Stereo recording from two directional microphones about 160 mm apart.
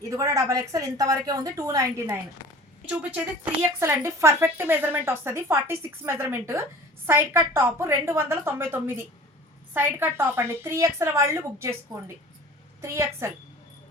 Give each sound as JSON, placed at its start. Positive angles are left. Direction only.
{"t": 0.0, "sound": "a woman's voice", "side_deg": -20}
{"t": 3.6, "sound": "a woman's voice", "side_deg": -15}